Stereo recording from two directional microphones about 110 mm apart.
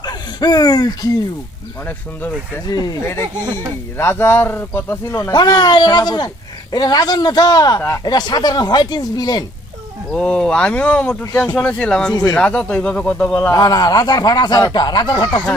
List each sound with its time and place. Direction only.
0.0 s speech: 40° left (ahead or behind)
2.6 s speech: 35° left (ahead or behind)
3.9 s speech: 20° left (ahead or behind)
5.3 s speech: 40° left (ahead or behind)
7.8 s speech: 25° left (ahead or behind)
8.0 s speech: 40° left (ahead or behind)
10.1 s speech: 10° left (ahead or behind)
13.5 s speech: 35° left (ahead or behind)